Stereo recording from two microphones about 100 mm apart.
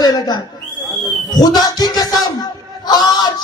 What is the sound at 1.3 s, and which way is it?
Music, 40° left (ahead or behind).